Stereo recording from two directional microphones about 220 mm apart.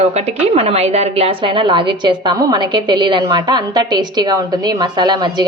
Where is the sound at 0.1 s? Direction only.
30° right (ahead or behind).